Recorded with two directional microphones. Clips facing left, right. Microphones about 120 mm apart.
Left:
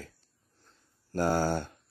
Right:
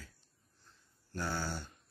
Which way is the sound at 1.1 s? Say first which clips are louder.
Left 11 dB; 45° left (ahead or behind).